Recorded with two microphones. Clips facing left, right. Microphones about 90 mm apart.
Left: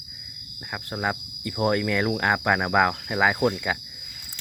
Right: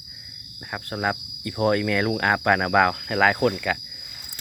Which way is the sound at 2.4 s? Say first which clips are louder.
Right 3 dB; 15° left (ahead or behind).